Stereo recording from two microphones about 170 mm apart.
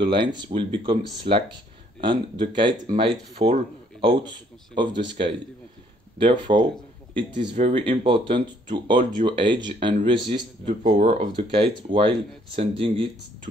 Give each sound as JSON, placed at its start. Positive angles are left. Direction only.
{"t": 0.0, "sound": "speech", "side_deg": -30}
{"t": 10.7, "sound": "speech", "side_deg": -50}
{"t": 11.1, "sound": "speech", "side_deg": -35}